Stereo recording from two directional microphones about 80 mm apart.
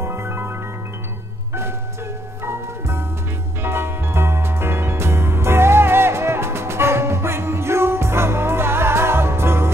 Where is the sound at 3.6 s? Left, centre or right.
Right.